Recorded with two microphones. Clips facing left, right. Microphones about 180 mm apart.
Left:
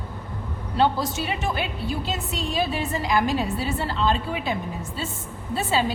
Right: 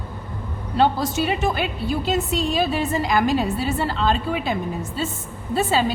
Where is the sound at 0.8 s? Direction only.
45° right (ahead or behind).